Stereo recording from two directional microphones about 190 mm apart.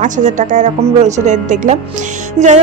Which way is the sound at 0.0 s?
40° right (ahead or behind).